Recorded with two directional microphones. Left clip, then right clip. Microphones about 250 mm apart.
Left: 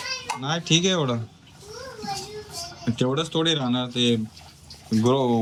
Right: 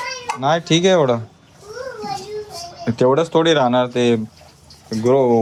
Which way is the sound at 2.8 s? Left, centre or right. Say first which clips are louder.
Right 10 dB; centre.